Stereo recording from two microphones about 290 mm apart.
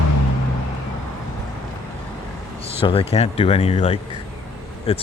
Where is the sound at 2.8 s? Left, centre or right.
Centre.